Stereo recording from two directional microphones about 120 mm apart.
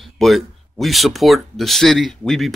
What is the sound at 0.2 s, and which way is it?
A man's voice, centre (ahead or behind).